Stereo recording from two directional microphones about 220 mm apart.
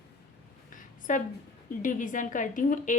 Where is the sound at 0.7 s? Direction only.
35° left (ahead or behind).